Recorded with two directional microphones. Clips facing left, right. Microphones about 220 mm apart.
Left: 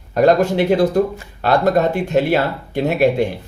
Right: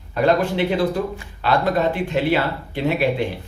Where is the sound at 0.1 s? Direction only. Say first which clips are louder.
Left 5 dB; 45° left (ahead or behind).